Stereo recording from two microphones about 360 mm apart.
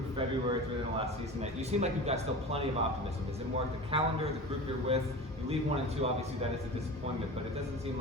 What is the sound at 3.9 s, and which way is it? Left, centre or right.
Speech, centre.